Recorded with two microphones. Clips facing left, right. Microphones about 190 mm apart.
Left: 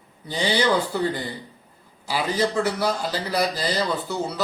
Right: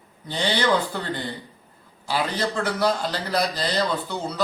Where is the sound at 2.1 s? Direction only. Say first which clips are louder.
Left 2 dB; 10° left (ahead or behind).